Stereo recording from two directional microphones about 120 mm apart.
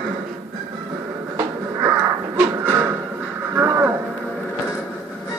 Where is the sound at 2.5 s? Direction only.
20° right (ahead or behind).